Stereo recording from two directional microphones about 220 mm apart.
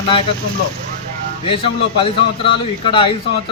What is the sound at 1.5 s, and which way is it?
A man's voice, 25° left (ahead or behind).